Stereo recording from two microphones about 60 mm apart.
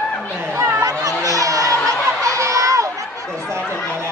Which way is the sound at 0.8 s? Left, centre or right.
Right.